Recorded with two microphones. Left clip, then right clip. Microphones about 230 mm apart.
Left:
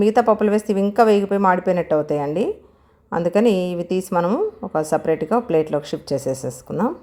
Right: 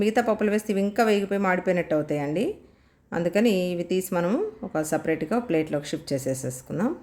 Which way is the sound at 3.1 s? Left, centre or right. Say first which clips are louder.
Left 6 dB; centre.